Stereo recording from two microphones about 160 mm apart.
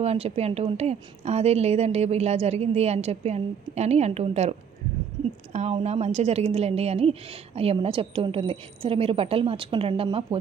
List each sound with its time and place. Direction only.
0.0 s speech: 40° right (ahead or behind)